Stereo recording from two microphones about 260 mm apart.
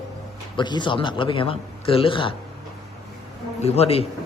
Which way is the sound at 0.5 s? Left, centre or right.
Centre.